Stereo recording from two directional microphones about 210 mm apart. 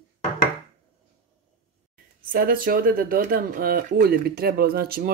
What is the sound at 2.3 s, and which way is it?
Speech, 45° right (ahead or behind).